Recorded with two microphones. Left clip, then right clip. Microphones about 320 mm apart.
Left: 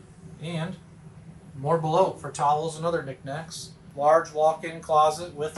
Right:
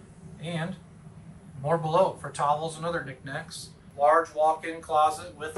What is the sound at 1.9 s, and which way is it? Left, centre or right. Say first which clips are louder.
Speech: right 1 dB; centre.